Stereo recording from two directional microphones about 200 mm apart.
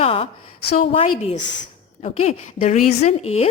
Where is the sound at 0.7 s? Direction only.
40° left (ahead or behind).